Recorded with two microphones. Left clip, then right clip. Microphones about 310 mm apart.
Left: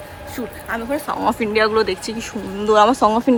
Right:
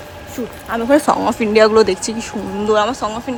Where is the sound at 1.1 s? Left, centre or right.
Centre.